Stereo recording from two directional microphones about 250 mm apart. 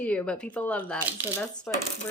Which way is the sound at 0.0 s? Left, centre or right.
Centre.